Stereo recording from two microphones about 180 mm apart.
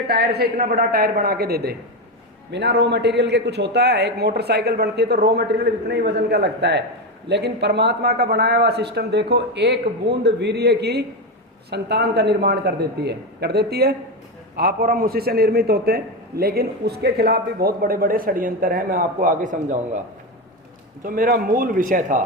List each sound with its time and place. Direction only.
0.1 s a man's voice: 60° right (ahead or behind)
2.5 s a man's voice: 70° right (ahead or behind); by 20.0 s 45° right (ahead or behind)
21.0 s speech: 50° right (ahead or behind)